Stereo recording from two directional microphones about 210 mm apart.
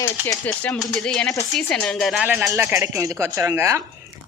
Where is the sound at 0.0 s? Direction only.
10° left (ahead or behind).